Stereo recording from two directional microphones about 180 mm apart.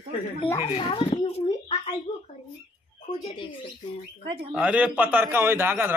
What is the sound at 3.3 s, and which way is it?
Speech, 30° left (ahead or behind).